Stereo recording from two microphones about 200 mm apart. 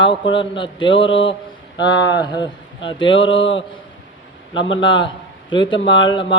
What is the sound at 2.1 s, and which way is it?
Mantra, 20° left (ahead or behind).